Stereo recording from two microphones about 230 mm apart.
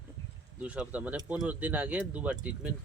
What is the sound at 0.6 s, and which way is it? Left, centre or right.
Speech, centre.